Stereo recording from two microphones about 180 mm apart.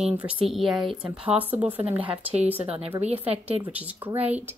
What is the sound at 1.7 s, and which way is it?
Speech, 30° right (ahead or behind).